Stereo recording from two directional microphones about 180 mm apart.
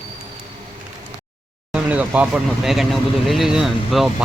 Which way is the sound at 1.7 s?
10° right (ahead or behind).